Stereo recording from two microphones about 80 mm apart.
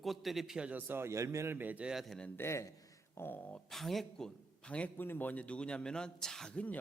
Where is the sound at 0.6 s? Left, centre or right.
Centre; by 1.5 s right.